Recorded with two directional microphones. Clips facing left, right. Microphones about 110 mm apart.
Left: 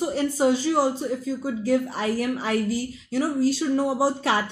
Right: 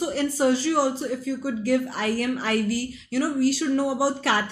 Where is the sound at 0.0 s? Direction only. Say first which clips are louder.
Left 1 dB; 20° left (ahead or behind).